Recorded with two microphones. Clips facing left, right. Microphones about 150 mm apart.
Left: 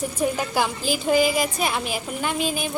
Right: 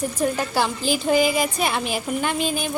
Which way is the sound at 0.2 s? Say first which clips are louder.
Even; 10° left (ahead or behind).